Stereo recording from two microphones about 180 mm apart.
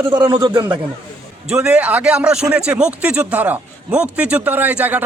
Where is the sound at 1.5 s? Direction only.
5° right (ahead or behind).